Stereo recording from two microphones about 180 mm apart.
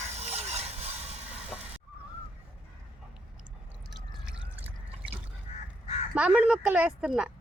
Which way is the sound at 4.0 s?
5° right (ahead or behind).